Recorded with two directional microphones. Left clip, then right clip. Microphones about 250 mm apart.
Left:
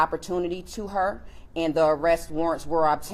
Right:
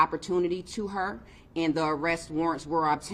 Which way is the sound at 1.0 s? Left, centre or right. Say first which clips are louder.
Left 6 dB; right.